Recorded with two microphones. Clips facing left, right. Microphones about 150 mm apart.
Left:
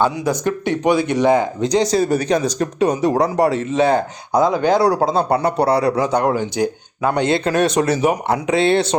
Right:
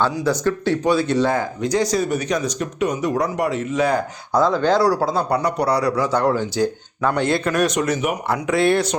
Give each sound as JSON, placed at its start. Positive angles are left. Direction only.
{"t": 0.0, "sound": "speech", "side_deg": 15}